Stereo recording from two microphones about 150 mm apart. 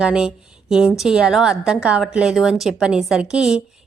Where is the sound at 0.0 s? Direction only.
5° right (ahead or behind).